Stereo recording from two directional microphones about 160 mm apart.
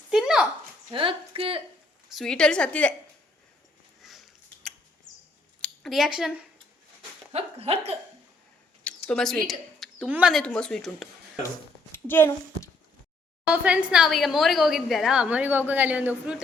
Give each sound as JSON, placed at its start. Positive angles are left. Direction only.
{"t": 0.1, "sound": "a sound", "side_deg": -5}
{"t": 0.9, "sound": "a woman's voice", "side_deg": -35}
{"t": 2.0, "sound": "a woman's voice", "side_deg": 0}
{"t": 4.0, "sound": "a sound", "side_deg": 0}
{"t": 5.6, "sound": "speech", "side_deg": 0}
{"t": 7.3, "sound": "speech", "side_deg": -40}
{"t": 8.8, "sound": "a sound", "side_deg": 5}
{"t": 10.1, "sound": "speech", "side_deg": -5}
{"t": 10.4, "sound": "a woman's voice", "side_deg": 5}
{"t": 11.9, "sound": "a child's voice", "side_deg": 15}
{"t": 13.5, "sound": "a woman's voice", "side_deg": -5}